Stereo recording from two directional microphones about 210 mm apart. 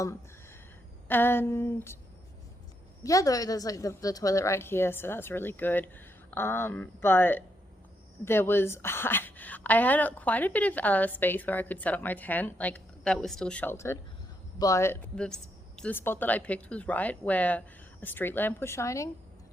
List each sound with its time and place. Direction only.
1.0 s a woman's voice: 10° left (ahead or behind)
3.0 s a woman's voice: 15° left (ahead or behind)